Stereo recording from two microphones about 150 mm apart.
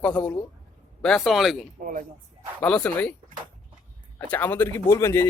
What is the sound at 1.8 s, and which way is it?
Speech, 65° right (ahead or behind).